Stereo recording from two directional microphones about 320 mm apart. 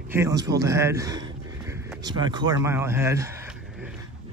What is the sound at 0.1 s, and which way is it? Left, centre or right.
Speech, centre.